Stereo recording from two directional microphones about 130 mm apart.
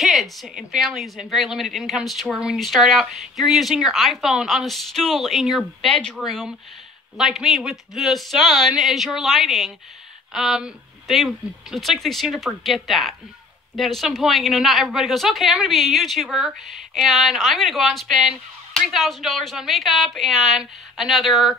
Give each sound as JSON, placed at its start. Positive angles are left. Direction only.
{"t": 0.0, "sound": "a woman's voice", "side_deg": 0}